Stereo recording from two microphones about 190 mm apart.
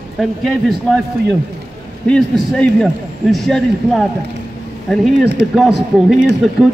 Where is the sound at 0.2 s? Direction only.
Centre (ahead or behind).